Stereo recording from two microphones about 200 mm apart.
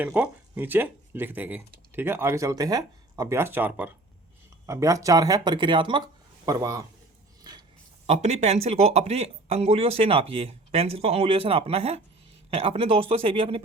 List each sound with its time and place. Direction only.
0.0 s a man's voice: 5° right (ahead or behind)
8.0 s speech: 35° right (ahead or behind)